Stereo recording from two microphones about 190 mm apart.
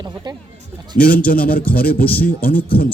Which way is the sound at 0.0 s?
25° right (ahead or behind).